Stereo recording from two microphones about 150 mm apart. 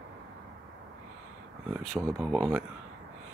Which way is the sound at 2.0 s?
15° right (ahead or behind).